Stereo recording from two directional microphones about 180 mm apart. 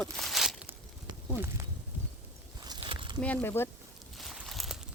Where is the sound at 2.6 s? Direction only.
25° right (ahead or behind).